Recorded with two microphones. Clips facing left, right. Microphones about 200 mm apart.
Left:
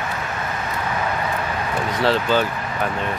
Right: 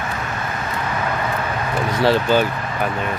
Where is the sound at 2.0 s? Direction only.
10° right (ahead or behind).